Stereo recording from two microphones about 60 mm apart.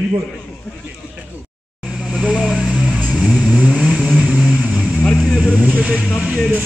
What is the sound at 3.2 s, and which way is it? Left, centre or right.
Vehicle, centre.